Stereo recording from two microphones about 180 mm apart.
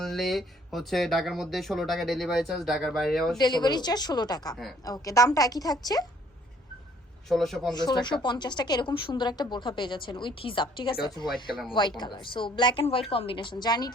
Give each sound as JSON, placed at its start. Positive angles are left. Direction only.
{"t": 0.0, "sound": "speech", "side_deg": 0}
{"t": 3.3, "sound": "speech", "side_deg": 25}
{"t": 7.3, "sound": "speech", "side_deg": 0}
{"t": 7.7, "sound": "speech", "side_deg": 20}